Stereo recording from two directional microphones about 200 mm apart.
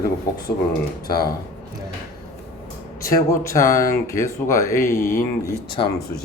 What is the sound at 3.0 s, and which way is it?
Speech, 15° left (ahead or behind).